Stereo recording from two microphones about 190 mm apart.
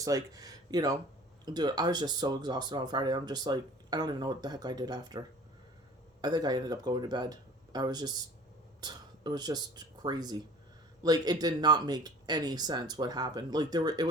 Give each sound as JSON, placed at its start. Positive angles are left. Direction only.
{"t": 0.0, "sound": "speech", "side_deg": -20}
{"t": 6.2, "sound": "speech", "side_deg": -20}